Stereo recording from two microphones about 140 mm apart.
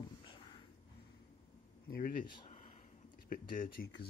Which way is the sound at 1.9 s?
90° left.